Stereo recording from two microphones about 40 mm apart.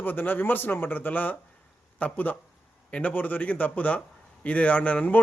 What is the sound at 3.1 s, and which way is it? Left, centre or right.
Speech, left.